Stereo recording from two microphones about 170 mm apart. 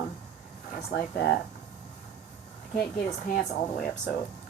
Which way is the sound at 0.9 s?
70° left (ahead or behind).